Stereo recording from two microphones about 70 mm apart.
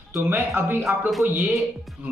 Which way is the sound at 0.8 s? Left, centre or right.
Centre.